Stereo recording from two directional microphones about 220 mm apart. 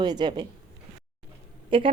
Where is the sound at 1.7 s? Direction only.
25° right (ahead or behind).